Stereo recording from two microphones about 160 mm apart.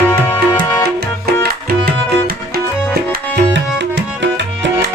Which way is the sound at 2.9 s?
85° right.